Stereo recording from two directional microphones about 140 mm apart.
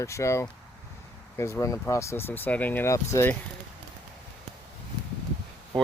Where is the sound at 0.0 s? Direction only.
20° left (ahead or behind).